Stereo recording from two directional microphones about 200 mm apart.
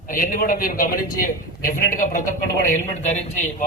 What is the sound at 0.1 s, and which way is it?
A man's voice, 45° left (ahead or behind).